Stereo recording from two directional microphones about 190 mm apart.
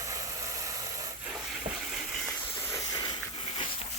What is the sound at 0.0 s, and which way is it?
Ratchet, 15° right (ahead or behind).